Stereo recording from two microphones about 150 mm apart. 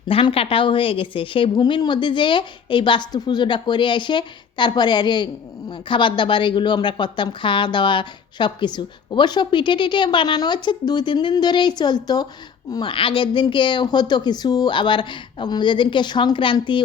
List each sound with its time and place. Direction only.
0.1 s a woman's voice: 40° left (ahead or behind)